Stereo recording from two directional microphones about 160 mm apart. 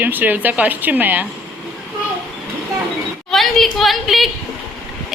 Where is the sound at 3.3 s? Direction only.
Centre (ahead or behind).